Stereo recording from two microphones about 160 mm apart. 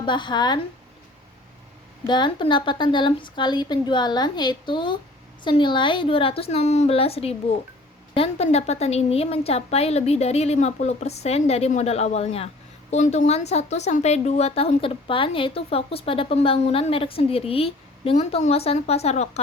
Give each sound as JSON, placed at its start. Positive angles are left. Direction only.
{"t": 0.0, "sound": "a woman's voice", "side_deg": 30}
{"t": 2.0, "sound": "a woman's voice", "side_deg": 30}